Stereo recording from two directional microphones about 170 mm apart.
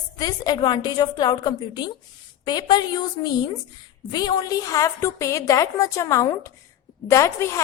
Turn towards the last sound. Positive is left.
turn(degrees=15)  # may be behind; listen again after turning